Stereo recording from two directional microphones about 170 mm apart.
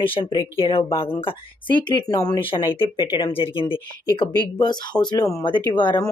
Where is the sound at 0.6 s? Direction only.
30° left (ahead or behind).